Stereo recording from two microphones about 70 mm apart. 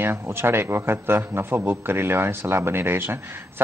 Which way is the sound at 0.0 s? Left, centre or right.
Right.